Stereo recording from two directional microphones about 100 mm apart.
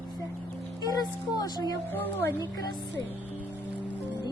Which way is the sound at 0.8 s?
40° left (ahead or behind).